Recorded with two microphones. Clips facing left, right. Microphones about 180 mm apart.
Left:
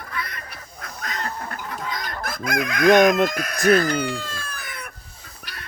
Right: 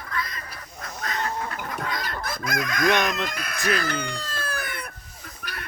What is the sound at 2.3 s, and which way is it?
Speech, 55° left (ahead or behind).